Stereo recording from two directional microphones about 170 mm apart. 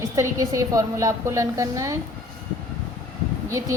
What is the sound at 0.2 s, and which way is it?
A woman's voice, 20° right (ahead or behind).